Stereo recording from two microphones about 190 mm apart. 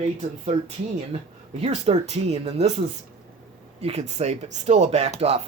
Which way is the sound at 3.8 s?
35° right (ahead or behind).